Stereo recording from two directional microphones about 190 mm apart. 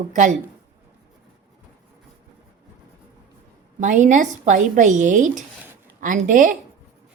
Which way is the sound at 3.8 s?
40° right (ahead or behind).